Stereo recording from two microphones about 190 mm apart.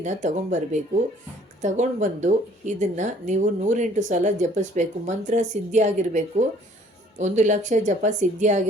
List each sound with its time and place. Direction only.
0.0 s speech: 40° right (ahead or behind)